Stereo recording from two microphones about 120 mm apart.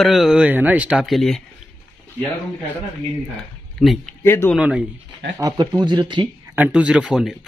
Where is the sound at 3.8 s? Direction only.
Centre (ahead or behind).